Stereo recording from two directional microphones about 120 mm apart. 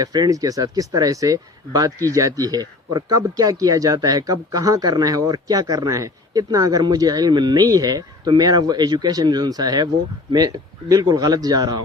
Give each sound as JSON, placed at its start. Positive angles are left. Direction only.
{"t": 0.0, "sound": "speech", "side_deg": -30}